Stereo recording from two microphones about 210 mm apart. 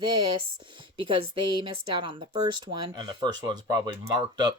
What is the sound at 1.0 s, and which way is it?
Speech, 20° right (ahead or behind).